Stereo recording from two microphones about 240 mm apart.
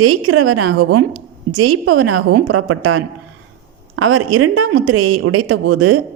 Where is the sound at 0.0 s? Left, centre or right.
Right.